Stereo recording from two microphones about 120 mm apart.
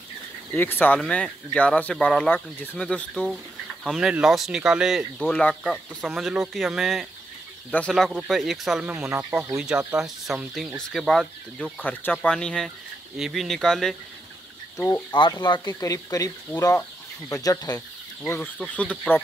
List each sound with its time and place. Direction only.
0.6 s speech: 15° left (ahead or behind)
3.8 s speech: 5° right (ahead or behind)
5.3 s speech: 5° left (ahead or behind)
7.7 s speech: 15° left (ahead or behind)
8.3 s speech: centre (ahead or behind)
9.1 s speech: 15° right (ahead or behind)
9.6 s speech: 5° right (ahead or behind)
11.8 s speech: 15° left (ahead or behind)
15.0 s speech: 40° left (ahead or behind)
15.7 s speech: 30° left (ahead or behind)
17.7 s speech: 15° left (ahead or behind)